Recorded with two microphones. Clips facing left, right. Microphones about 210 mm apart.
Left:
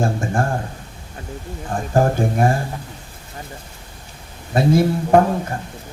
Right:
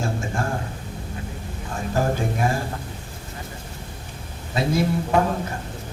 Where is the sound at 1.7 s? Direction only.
50° left (ahead or behind).